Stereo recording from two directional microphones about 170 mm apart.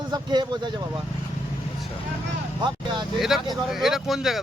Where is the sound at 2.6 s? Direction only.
25° right (ahead or behind).